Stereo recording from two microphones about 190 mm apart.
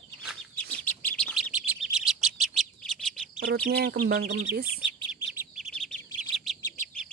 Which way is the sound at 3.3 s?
55° right (ahead or behind).